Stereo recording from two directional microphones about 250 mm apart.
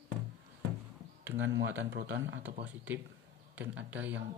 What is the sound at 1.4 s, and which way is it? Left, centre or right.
Speech, right.